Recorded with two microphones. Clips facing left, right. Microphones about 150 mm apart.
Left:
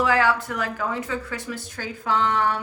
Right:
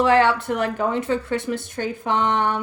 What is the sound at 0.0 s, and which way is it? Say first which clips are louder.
A woman's voice: right 4 dB; 25° right (ahead or behind).